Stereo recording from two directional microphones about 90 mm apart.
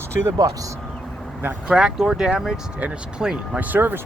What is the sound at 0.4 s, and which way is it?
Speech, 45° right (ahead or behind).